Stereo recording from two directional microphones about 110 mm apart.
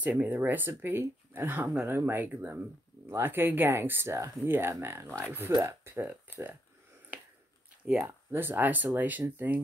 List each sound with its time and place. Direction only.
0.0 s speech: 15° right (ahead or behind)
6.0 s speech: 15° right (ahead or behind)
7.8 s speech: 15° right (ahead or behind)